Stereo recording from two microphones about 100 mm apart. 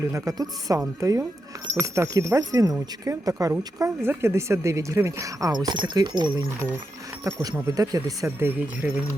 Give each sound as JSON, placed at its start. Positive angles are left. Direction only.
{"t": 0.1, "sound": "speech", "side_deg": -35}
{"t": 4.0, "sound": "speech", "side_deg": -25}
{"t": 7.3, "sound": "speech", "side_deg": -35}
{"t": 8.4, "sound": "speech", "side_deg": -20}